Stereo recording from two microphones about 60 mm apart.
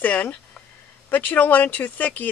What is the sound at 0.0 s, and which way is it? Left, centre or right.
Speech, left.